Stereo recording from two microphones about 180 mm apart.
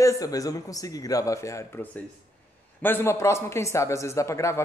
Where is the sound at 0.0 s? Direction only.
20° left (ahead or behind).